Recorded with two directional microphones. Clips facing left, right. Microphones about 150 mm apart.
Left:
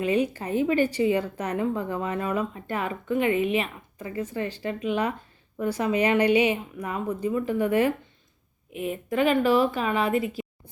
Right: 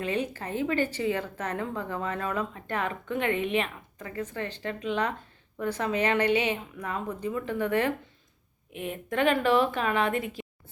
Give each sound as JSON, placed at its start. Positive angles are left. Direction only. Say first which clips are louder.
{"t": 0.0, "sound": "a woman's voice", "louder": "left 6 dB", "side_deg": 10}